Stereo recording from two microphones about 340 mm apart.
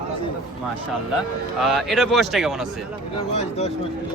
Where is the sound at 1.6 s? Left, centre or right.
Centre.